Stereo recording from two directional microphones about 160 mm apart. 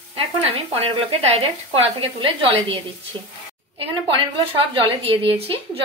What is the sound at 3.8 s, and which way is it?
A woman's voice, 35° right (ahead or behind).